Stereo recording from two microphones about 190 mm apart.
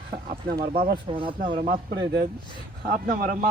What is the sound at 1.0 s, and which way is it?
Speech, 25° right (ahead or behind).